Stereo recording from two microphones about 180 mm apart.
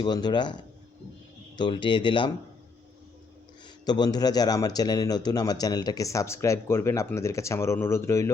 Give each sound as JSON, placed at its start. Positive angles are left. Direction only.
{"t": 0.0, "sound": "speech", "side_deg": 25}
{"t": 1.5, "sound": "speech", "side_deg": 25}
{"t": 3.8, "sound": "speech", "side_deg": 25}